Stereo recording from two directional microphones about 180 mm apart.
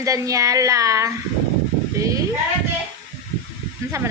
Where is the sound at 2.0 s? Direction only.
15° right (ahead or behind).